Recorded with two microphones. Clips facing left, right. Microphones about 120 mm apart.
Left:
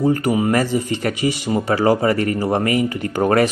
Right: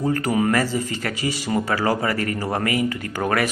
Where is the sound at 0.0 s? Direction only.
20° left (ahead or behind).